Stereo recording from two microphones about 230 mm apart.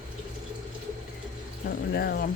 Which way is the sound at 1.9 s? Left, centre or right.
Left.